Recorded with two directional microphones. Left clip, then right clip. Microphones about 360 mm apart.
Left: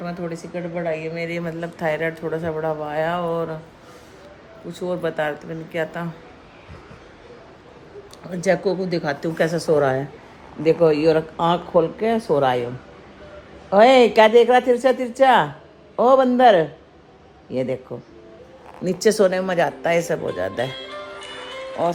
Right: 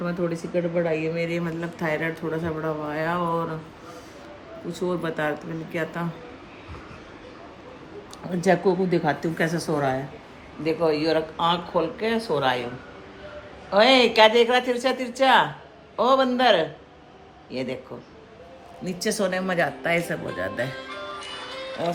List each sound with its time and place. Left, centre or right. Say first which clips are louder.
0.0 s speech: right 2 dB; centre
4.7 s speech: left 3 dB; centre
8.4 s speech: left 1 dB; centre
10.8 s speech: left 3 dB; centre
13.7 s speech: left 5 dB; centre
18.9 s speech: left 8 dB; centre
21.8 s speech: left 6 dB; centre